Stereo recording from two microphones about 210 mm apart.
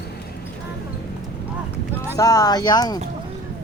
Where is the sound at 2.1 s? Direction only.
15° left (ahead or behind).